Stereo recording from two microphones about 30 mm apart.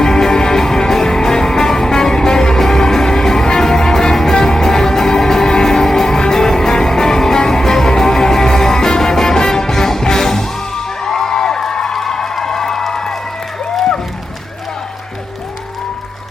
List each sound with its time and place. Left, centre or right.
0.0 s music: centre